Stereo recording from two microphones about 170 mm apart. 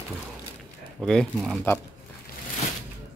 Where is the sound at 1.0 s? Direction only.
5° left (ahead or behind).